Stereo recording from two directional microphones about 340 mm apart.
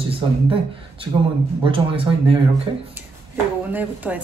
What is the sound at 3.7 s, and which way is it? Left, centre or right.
Speech, centre.